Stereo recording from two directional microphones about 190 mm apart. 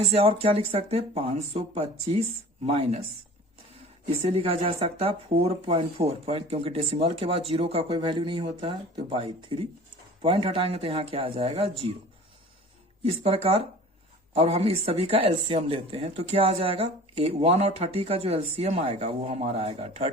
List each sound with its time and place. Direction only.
0.1 s speech: 30° right (ahead or behind)
4.2 s speech: 30° right (ahead or behind)
13.1 s speech: 30° right (ahead or behind)